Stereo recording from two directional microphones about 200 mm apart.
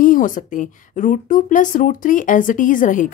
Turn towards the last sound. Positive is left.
turn(degrees=40)  # may be behind; listen again after turning